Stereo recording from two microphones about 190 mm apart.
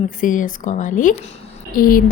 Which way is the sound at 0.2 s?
45° left (ahead or behind).